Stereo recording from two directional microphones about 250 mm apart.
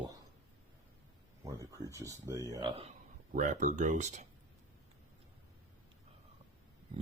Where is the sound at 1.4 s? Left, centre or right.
Centre.